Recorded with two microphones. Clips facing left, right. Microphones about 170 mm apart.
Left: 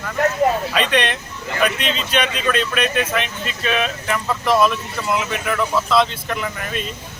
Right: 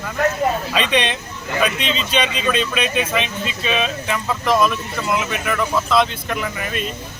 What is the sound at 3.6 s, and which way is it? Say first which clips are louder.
Speech: left 1 dB; 5° right (ahead or behind).